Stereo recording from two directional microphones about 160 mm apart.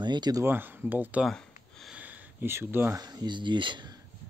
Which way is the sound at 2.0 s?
10° right (ahead or behind).